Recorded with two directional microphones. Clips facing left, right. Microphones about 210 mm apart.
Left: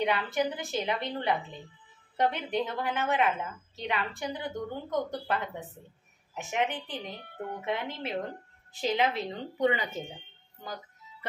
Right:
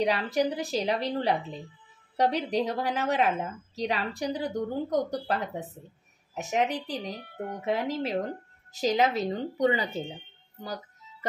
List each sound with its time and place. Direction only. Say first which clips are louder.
0.0 s a woman's voice: right 3 dB; 35° right (ahead or behind)